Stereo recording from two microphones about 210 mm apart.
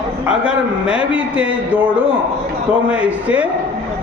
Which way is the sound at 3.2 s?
5° right (ahead or behind).